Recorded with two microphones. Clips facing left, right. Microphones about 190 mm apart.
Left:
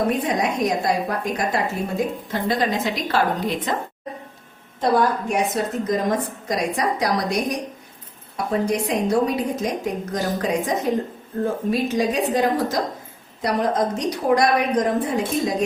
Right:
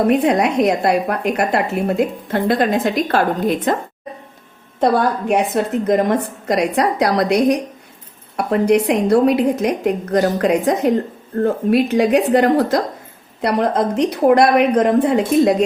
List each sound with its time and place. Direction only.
0.1 s a woman's voice: 65° right (ahead or behind)
5.8 s a woman's voice: 60° right (ahead or behind)